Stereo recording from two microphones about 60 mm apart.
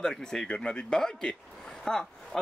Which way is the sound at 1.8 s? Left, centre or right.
Centre.